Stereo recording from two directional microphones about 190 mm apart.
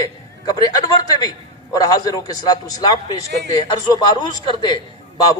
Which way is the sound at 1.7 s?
20° left (ahead or behind).